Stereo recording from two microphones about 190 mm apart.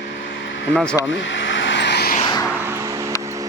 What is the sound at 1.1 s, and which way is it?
Vehicle, 75° left (ahead or behind).